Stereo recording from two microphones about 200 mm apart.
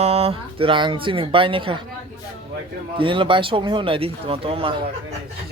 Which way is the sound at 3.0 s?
25° right (ahead or behind).